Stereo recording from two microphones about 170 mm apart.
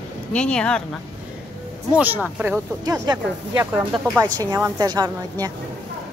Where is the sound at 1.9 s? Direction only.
10° right (ahead or behind).